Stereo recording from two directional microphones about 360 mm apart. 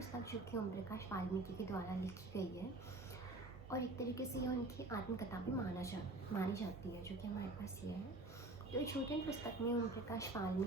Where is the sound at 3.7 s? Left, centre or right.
Centre.